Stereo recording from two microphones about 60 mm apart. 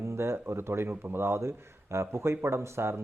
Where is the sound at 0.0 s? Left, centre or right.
Right.